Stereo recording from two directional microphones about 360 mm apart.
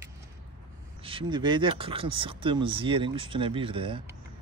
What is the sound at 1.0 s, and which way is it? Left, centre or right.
Speech, centre.